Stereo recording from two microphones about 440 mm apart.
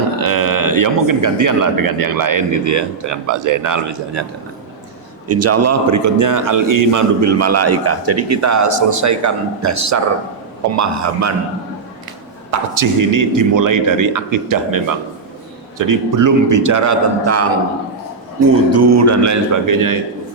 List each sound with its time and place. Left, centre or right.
0.2 s a man's voice: right
5.3 s a man's voice: right
12.5 s a man's voice: right
18.5 s a man's voice: right